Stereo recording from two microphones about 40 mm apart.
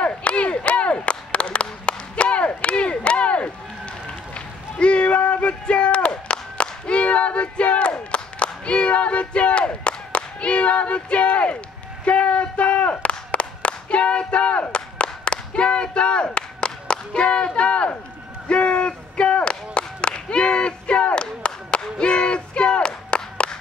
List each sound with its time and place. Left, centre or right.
0.0 s clapping: left
4.3 s run: left
7.9 s crowd: left
12.0 s clapping: left
17.6 s speech: left
18.5 s a sound: left